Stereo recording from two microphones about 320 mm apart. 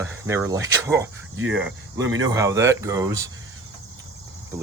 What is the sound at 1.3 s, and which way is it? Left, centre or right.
Speech, right.